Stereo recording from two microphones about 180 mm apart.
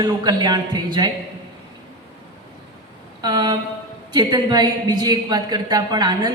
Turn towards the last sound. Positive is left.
turn(degrees=-25)  # may be behind; listen again after turning